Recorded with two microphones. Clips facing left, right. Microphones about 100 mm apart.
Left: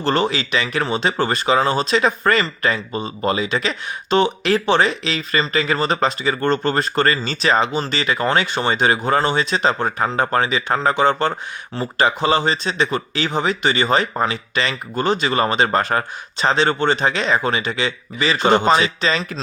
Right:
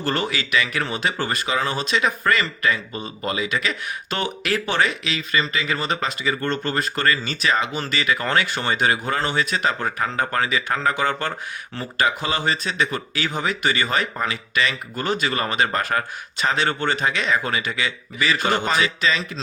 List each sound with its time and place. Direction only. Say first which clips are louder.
0.0 s speech: left 5 dB; 30° left (ahead or behind)